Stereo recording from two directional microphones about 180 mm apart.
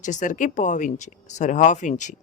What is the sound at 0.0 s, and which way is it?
Speech, 45° left (ahead or behind).